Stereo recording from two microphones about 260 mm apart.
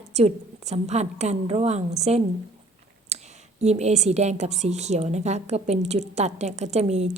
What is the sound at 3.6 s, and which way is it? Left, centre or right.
A woman's voice, right.